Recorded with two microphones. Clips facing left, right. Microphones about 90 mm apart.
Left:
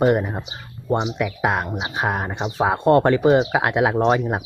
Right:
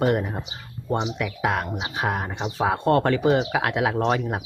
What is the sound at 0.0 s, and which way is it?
Speech, 25° left (ahead or behind).